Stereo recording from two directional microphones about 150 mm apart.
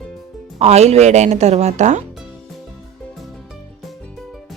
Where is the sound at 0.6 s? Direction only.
45° right (ahead or behind).